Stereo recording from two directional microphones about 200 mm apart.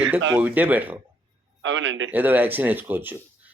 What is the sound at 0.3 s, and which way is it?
Speech, 10° right (ahead or behind).